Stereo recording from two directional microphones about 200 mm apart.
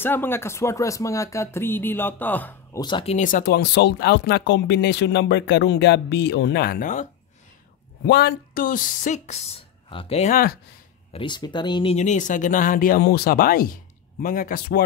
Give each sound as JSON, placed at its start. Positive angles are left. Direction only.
{"t": 0.0, "sound": "speech", "side_deg": 10}
{"t": 2.8, "sound": "speech", "side_deg": 25}
{"t": 8.1, "sound": "speech", "side_deg": 55}
{"t": 11.1, "sound": "speech", "side_deg": 20}